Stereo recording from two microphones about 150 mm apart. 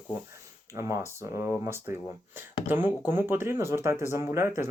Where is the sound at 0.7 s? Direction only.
20° right (ahead or behind).